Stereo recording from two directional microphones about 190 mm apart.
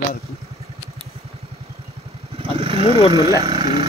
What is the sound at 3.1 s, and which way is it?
Speech, 20° right (ahead or behind).